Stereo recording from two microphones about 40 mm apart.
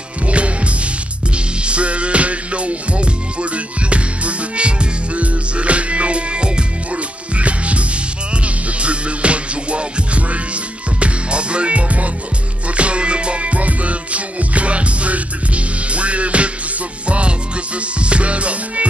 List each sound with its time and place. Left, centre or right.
0.3 s music: right
8.8 s music: right
17.9 s music: right